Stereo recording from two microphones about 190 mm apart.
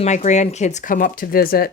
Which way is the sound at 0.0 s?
35° left (ahead or behind).